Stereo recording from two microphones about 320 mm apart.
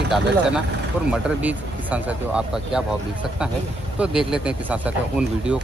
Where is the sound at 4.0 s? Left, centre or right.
Centre.